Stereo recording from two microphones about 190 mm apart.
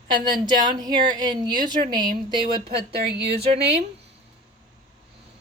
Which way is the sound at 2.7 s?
60° right (ahead or behind).